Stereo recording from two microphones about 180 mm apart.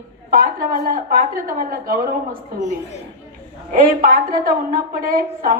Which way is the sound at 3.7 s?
50° right (ahead or behind).